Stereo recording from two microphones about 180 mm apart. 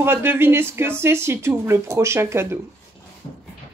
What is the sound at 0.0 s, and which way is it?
Speech, 15° right (ahead or behind).